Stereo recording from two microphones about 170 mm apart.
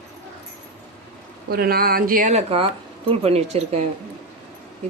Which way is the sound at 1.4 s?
65° right (ahead or behind).